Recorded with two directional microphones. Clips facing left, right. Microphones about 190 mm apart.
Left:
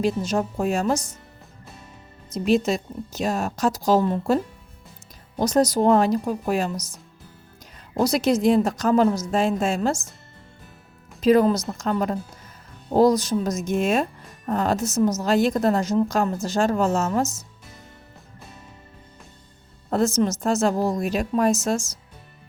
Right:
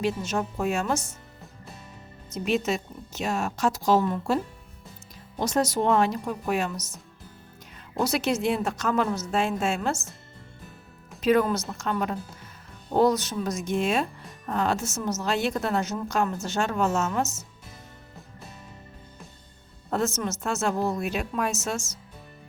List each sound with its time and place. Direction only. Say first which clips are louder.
0.0 s a woman's voice: left 4 dB; 35° left (ahead or behind)
2.5 s a woman's voice: left 5 dB; 35° left (ahead or behind)
5.4 s a woman's voice: left 5 dB; 40° left (ahead or behind)
7.9 s a woman's voice: left 5 dB; 35° left (ahead or behind)
11.2 s a woman's voice: left 5 dB; 35° left (ahead or behind)
19.9 s a woman's voice: left 6 dB; 35° left (ahead or behind)